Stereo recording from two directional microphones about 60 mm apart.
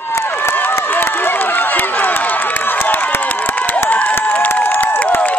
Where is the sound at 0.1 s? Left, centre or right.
Left.